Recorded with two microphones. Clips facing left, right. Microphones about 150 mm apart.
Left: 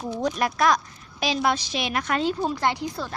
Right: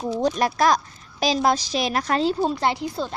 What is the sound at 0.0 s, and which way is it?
A woman's voice, 30° right (ahead or behind).